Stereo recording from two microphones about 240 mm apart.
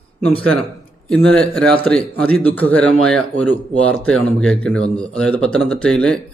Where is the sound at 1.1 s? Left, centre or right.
Centre.